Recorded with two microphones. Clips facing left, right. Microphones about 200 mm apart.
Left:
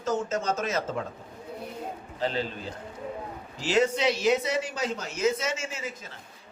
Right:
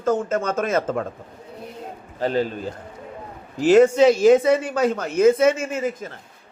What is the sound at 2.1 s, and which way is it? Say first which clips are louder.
Speech: right 8 dB; 50° right (ahead or behind).